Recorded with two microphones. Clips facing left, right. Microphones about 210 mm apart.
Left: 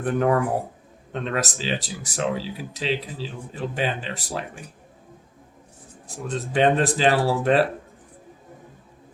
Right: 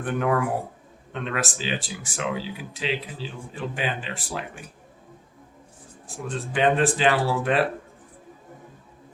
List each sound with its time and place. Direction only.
0.0 s speech: 35° left (ahead or behind)
6.1 s speech: 40° left (ahead or behind)